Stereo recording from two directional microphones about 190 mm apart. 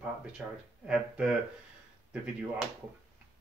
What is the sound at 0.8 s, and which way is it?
Speech, 5° right (ahead or behind).